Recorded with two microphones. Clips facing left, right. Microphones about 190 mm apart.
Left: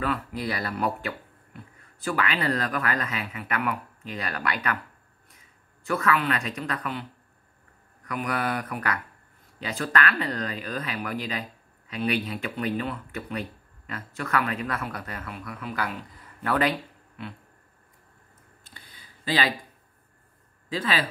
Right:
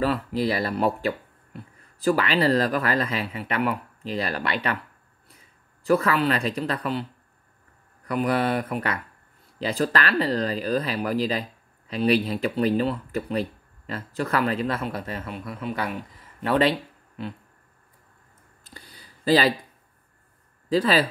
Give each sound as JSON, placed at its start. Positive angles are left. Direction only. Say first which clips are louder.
{"t": 0.0, "sound": "speech", "louder": "right 5 dB", "side_deg": -30}
{"t": 5.9, "sound": "speech", "louder": "right 4 dB", "side_deg": -35}
{"t": 18.7, "sound": "a sound", "louder": "right 5 dB", "side_deg": -40}
{"t": 20.7, "sound": "speech", "louder": "right 7 dB", "side_deg": -35}